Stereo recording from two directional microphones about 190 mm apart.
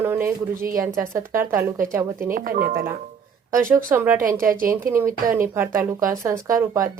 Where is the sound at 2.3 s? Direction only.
50° right (ahead or behind).